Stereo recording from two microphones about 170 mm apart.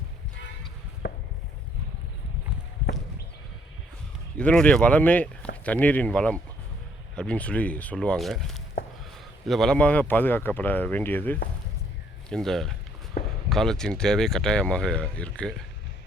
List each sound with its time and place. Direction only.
1.0 s chopping: 90° left
4.4 s speech: 5° left (ahead or behind)
13.2 s a sound: 45° left (ahead or behind)
13.5 s speech: centre (ahead or behind)